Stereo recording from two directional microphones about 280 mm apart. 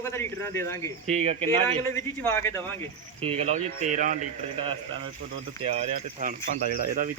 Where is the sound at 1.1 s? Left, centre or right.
Right.